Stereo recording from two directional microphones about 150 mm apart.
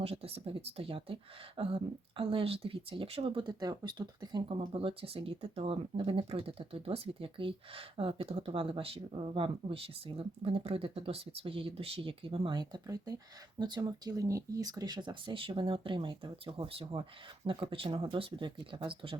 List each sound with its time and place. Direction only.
0.0 s speech: 40° right (ahead or behind)